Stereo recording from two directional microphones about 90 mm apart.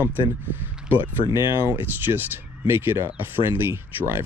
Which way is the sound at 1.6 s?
25° right (ahead or behind).